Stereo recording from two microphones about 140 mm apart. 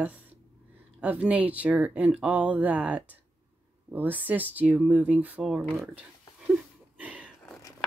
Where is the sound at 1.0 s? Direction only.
10° right (ahead or behind).